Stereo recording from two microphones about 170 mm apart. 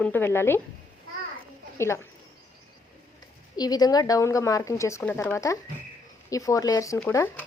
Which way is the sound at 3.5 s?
25° left (ahead or behind).